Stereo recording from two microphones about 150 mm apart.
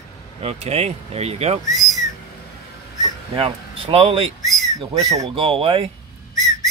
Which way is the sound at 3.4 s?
40° right (ahead or behind).